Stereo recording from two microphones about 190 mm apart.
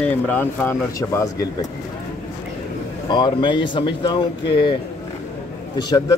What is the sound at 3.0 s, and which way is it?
A man's voice, 25° left (ahead or behind).